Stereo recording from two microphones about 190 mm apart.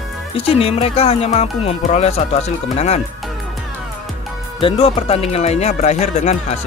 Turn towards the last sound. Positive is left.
turn(degrees=35)  # may be behind; listen again after turning